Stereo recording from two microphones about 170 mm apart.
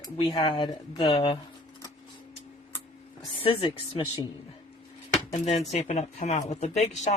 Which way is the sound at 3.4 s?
30° left (ahead or behind).